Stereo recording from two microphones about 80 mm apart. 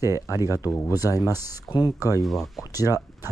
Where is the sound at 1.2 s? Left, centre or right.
Left.